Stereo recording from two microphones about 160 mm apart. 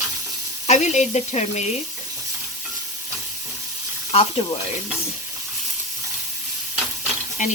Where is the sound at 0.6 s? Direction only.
45° left (ahead or behind).